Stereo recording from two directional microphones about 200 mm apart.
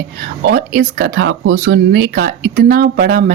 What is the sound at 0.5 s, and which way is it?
A woman's voice, 55° right (ahead or behind).